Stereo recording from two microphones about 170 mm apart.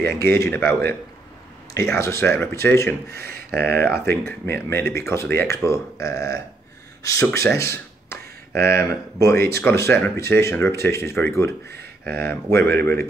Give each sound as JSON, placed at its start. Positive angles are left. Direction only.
{"t": 0.2, "sound": "speech", "side_deg": 15}
{"t": 3.1, "sound": "speech", "side_deg": -65}
{"t": 4.6, "sound": "speech", "side_deg": 15}
{"t": 12.1, "sound": "speech", "side_deg": -65}
{"t": 12.4, "sound": "speech", "side_deg": 15}